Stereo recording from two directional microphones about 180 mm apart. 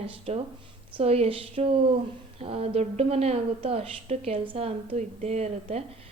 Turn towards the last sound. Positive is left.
turn(degrees=-35)  # may be behind; listen again after turning